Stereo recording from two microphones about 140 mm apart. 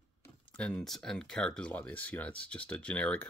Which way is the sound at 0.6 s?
5° left (ahead or behind).